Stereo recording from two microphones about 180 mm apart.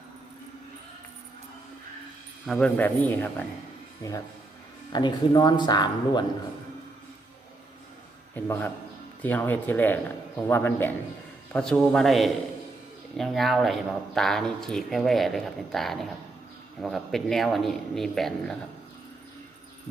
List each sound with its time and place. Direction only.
2.5 s a man's voice: 5° left (ahead or behind)
4.9 s speech: 25° left (ahead or behind)
8.4 s a man's voice: 10° left (ahead or behind)